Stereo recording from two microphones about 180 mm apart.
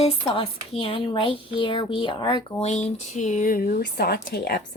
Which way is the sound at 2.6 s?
40° left (ahead or behind).